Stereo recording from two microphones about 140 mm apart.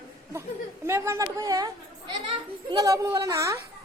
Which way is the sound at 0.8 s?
15° right (ahead or behind).